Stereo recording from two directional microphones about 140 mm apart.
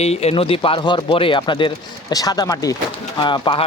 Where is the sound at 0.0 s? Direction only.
50° left (ahead or behind).